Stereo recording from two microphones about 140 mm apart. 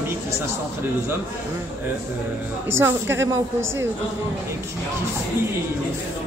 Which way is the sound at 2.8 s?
15° right (ahead or behind).